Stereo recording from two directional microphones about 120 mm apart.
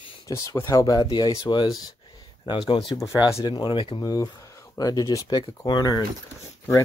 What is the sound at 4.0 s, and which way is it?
Speech, 30° left (ahead or behind).